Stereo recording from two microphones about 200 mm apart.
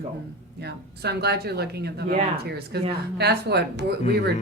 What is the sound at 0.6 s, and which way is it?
A woman's voice, 55° right (ahead or behind).